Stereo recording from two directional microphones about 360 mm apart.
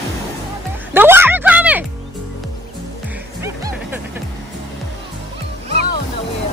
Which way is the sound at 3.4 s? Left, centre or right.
Centre.